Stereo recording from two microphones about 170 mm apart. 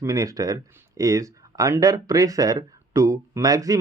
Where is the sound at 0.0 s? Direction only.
20° right (ahead or behind).